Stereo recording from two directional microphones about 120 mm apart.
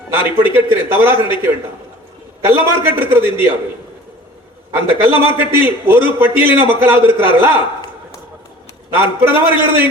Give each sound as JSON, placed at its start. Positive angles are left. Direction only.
{"t": 0.1, "sound": "a man's voice", "side_deg": -20}
{"t": 4.7, "sound": "a man's voice", "side_deg": -20}
{"t": 9.0, "sound": "a man's voice", "side_deg": -20}